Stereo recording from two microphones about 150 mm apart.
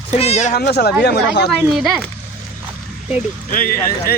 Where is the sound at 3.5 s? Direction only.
70° left (ahead or behind).